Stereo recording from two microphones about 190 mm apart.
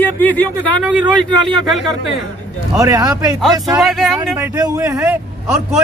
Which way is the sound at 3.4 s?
Centre (ahead or behind).